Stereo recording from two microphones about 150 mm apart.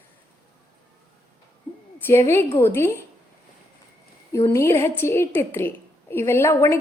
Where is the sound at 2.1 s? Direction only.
15° left (ahead or behind).